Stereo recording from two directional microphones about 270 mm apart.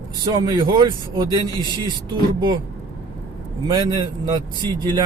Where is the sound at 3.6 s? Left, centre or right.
Centre.